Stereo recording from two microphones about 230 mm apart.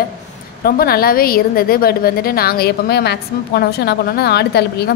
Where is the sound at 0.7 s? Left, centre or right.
Left.